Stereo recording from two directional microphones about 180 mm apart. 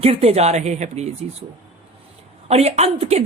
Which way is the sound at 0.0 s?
35° right (ahead or behind).